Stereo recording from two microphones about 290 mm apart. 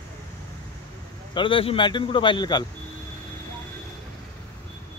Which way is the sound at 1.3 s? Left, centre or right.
Centre.